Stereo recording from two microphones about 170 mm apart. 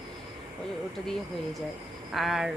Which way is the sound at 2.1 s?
Centre (ahead or behind).